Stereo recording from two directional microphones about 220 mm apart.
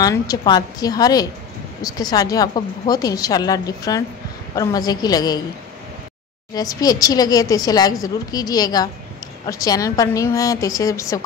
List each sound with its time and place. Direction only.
0.0 s a woman's voice: 15° left (ahead or behind)
6.5 s a woman's voice: 15° left (ahead or behind)